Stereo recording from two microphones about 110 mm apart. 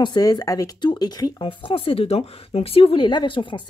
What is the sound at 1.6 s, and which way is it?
Speech, 55° left (ahead or behind).